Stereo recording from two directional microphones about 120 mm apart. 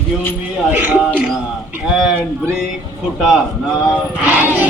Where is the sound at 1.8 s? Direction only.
10° right (ahead or behind).